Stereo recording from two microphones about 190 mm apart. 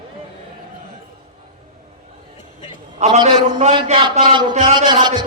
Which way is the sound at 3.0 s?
35° right (ahead or behind).